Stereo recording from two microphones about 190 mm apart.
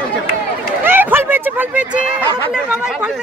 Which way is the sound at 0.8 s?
10° right (ahead or behind).